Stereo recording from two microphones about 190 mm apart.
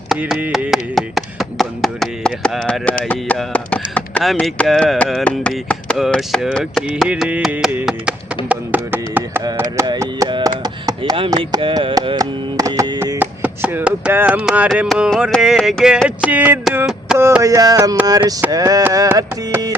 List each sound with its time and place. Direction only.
0.1 s a sound: 5° right (ahead or behind)
3.0 s speech: 5° left (ahead or behind)
8.4 s chopping: 10° right (ahead or behind)
17.2 s chopping: 15° right (ahead or behind)